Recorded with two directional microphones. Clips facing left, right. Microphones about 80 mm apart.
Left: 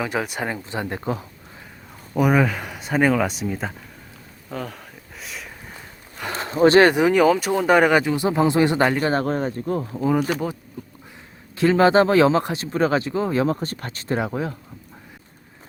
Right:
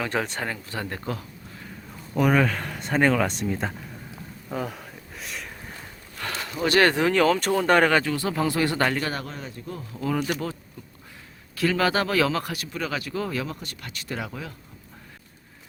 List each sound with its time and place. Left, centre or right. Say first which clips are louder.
0.0 s speech: left 2 dB; centre
2.1 s speech: left 2 dB; centre
4.4 s a sound: even; centre
6.3 s a sound: left 8 dB; left
6.8 s speech: left 4 dB; centre
9.2 s speech: left 13 dB; left
9.9 s speech: left 4 dB; centre
11.5 s speech: left 8 dB; left